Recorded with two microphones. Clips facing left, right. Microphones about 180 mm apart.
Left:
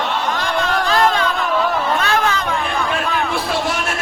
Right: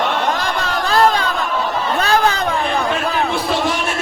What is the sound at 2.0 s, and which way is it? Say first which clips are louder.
Chatter: right 2 dB; 35° right (ahead or behind).